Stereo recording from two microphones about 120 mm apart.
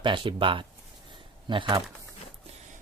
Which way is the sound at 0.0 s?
45° right (ahead or behind).